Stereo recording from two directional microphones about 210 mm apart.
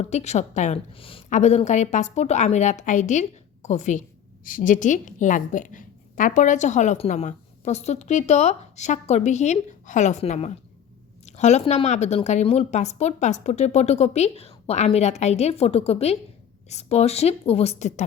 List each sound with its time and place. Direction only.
0.0 s a woman's voice: 30° left (ahead or behind)